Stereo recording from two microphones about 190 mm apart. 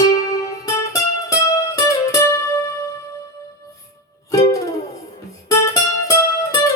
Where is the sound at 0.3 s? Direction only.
15° left (ahead or behind).